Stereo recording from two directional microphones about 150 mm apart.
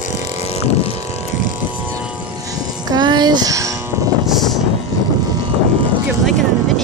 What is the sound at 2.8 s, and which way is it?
Music, 30° right (ahead or behind).